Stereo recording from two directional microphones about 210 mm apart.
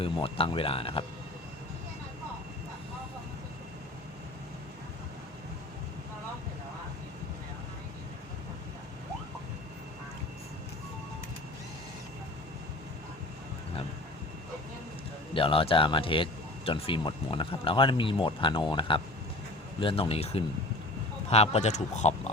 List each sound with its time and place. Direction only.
0.0 s speech: 25° left (ahead or behind)
15.3 s speech: 25° left (ahead or behind)